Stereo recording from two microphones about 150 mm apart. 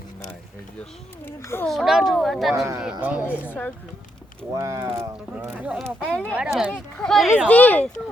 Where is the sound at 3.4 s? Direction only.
10° left (ahead or behind).